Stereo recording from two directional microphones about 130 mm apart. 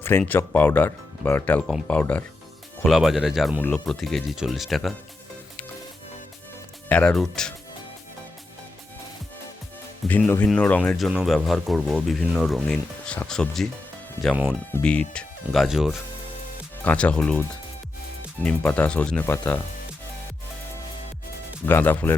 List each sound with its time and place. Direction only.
0.0 s speech: 15° left (ahead or behind)
2.8 s speech: centre (ahead or behind)
6.8 s speech: 10° left (ahead or behind)
10.1 s speech: 15° left (ahead or behind)
10.9 s speech: 5° right (ahead or behind)
14.7 s speech: 10° left (ahead or behind)
15.6 s speech: 5° right (ahead or behind)
16.8 s speech: 10° left (ahead or behind)
18.4 s speech: 10° left (ahead or behind)
21.7 s speech: 15° left (ahead or behind)